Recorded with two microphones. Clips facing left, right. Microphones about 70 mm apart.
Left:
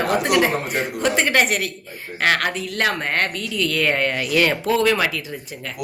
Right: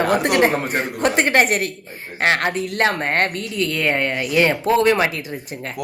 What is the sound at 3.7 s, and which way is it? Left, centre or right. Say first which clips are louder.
Speech: left 1 dB; centre.